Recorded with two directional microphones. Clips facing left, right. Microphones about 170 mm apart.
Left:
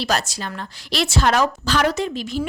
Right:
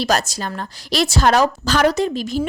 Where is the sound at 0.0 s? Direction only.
40° right (ahead or behind).